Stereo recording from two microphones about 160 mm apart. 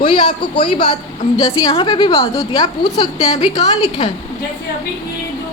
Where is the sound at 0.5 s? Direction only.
30° left (ahead or behind).